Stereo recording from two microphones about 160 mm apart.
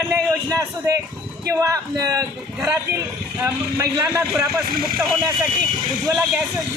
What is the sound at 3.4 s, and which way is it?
Speech, 20° right (ahead or behind).